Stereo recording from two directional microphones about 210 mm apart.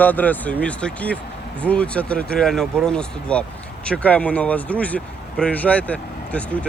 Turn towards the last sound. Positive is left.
turn(degrees=5)  # may be behind; listen again after turning